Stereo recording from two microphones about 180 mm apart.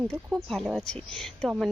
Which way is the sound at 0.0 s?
5° right (ahead or behind).